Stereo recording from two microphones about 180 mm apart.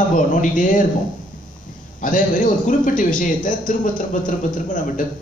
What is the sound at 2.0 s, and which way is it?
A man's voice, 50° left (ahead or behind).